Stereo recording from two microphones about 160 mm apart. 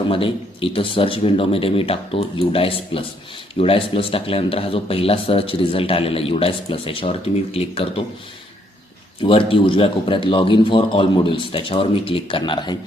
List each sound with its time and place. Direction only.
0.1 s a man's voice: 35° left (ahead or behind)
9.2 s a man's voice: 35° left (ahead or behind)